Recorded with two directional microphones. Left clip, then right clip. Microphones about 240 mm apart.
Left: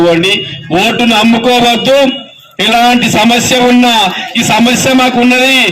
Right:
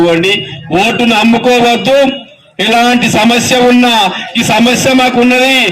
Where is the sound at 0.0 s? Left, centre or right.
Centre.